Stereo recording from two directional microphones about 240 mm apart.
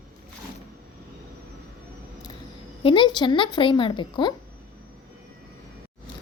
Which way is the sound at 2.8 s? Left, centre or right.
Left.